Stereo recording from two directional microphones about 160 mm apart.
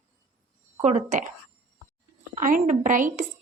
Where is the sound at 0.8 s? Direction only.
50° right (ahead or behind).